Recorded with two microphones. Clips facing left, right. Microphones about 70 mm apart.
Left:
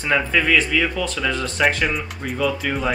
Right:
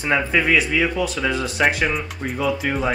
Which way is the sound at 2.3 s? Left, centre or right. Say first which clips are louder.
Even; centre.